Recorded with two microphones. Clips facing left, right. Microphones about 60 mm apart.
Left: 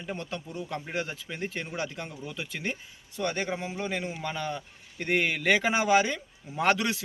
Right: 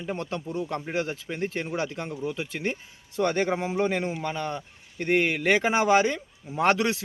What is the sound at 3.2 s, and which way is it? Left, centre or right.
Speech, right.